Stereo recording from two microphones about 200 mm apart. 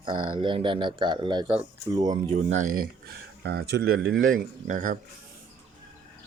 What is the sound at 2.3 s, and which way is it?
Speech, 40° right (ahead or behind).